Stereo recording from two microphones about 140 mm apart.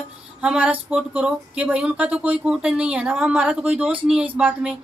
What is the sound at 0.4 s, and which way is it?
Speech, 10° right (ahead or behind).